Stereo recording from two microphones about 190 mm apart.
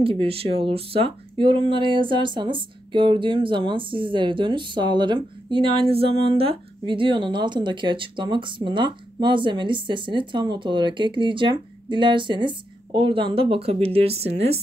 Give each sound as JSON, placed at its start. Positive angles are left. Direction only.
{"t": 0.0, "sound": "speech", "side_deg": -30}